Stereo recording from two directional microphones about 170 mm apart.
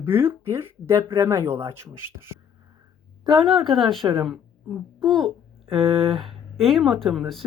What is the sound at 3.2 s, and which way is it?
A woman's voice, centre (ahead or behind).